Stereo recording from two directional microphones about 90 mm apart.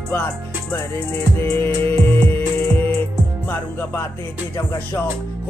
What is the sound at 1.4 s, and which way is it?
Music, 25° left (ahead or behind).